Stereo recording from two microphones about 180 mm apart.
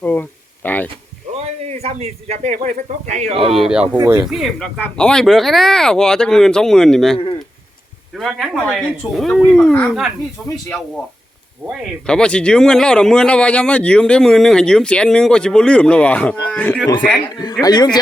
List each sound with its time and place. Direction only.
0.0 s speech: 10° left (ahead or behind)
1.3 s a man's voice: 35° right (ahead or behind)
3.5 s speech: centre (ahead or behind)
3.9 s speech: 15° right (ahead or behind)
4.3 s speech: centre (ahead or behind)
12.0 s speech: 5° left (ahead or behind)
17.4 s speech: 20° left (ahead or behind)